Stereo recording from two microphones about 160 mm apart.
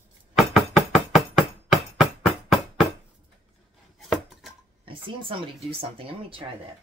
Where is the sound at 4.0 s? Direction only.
Centre (ahead or behind).